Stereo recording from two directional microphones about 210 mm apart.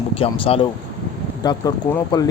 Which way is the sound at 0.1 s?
25° left (ahead or behind).